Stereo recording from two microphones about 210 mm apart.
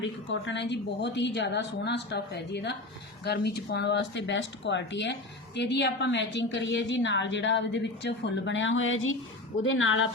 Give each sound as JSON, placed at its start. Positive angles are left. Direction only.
{"t": 0.0, "sound": "a woman's voice", "side_deg": 60}